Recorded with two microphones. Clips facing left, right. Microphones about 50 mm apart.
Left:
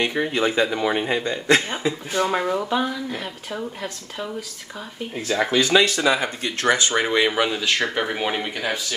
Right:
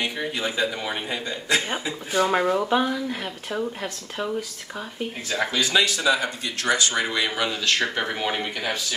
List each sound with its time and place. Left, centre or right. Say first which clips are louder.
0.0 s a man's voice: left 6 dB; left
1.1 s a man's voice: left 4 dB; left
2.1 s speech: right 3 dB; centre
5.5 s a man's voice: left 5 dB; left
6.1 s speech: left 2 dB; left; by 8.8 s centre